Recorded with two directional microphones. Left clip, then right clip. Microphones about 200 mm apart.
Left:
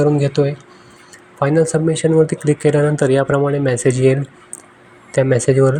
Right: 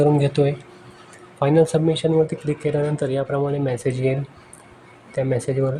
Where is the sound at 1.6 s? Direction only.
10° left (ahead or behind).